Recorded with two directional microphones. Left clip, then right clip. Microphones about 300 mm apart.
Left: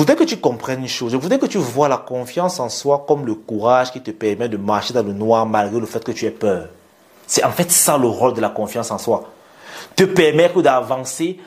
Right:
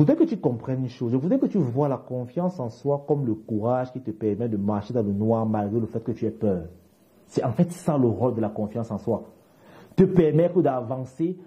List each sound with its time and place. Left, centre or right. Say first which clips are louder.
0.0 s a man's voice: left 7 dB; centre